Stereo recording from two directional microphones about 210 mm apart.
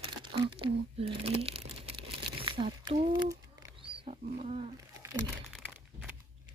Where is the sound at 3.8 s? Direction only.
30° right (ahead or behind).